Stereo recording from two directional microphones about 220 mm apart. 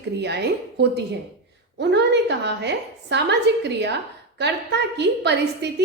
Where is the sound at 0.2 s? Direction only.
50° right (ahead or behind).